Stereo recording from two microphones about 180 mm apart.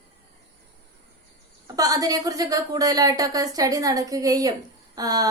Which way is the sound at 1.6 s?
20° right (ahead or behind).